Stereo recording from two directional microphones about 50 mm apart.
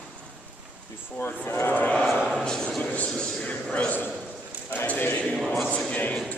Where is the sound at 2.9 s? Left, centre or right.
Left.